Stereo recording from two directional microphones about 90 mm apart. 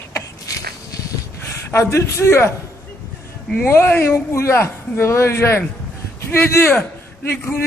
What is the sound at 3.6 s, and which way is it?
A man's voice, 25° left (ahead or behind).